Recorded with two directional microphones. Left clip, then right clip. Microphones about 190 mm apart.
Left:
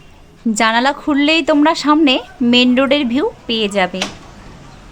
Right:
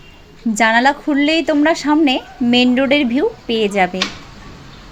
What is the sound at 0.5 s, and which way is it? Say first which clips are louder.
A woman's voice: right 1 dB; 10° left (ahead or behind).